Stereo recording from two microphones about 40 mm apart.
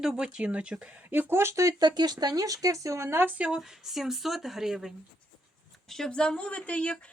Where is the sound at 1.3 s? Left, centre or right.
Right.